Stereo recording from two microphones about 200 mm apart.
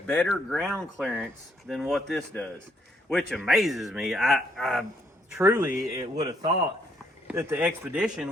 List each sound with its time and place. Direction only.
0.3 s speech: centre (ahead or behind)
5.4 s a man's voice: 10° right (ahead or behind)
7.3 s a man's voice: 10° right (ahead or behind)